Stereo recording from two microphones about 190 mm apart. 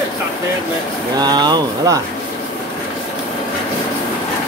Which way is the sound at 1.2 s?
20° right (ahead or behind).